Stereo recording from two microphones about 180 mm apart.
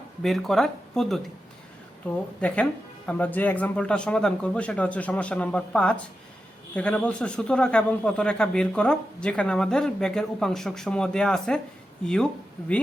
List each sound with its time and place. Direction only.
0.2 s a man's voice: centre (ahead or behind)